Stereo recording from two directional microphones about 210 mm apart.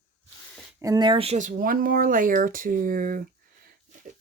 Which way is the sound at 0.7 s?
15° right (ahead or behind).